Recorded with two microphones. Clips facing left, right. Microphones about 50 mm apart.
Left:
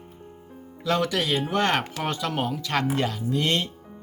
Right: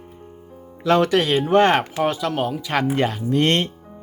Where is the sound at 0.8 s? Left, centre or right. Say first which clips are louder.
Right 7 dB; right.